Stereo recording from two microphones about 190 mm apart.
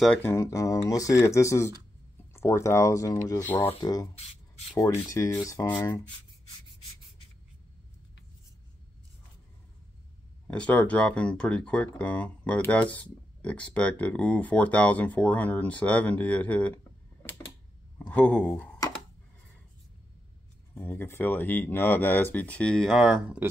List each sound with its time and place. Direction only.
0.0 s speech: 5° left (ahead or behind)
10.5 s speech: 5° left (ahead or behind)
20.7 s speech: 10° left (ahead or behind); by 23.5 s 5° right (ahead or behind)